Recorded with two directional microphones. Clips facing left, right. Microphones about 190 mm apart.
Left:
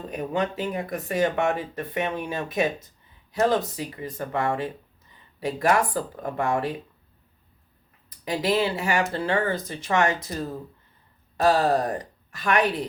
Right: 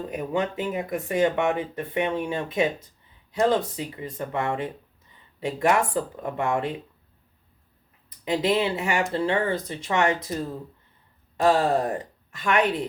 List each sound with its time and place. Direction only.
0.1 s speech: 20° right (ahead or behind)
8.2 s speech: 20° right (ahead or behind)
11.4 s speech: 25° right (ahead or behind)